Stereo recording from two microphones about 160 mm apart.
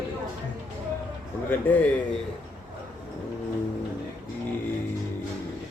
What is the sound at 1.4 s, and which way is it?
Speech, 10° left (ahead or behind).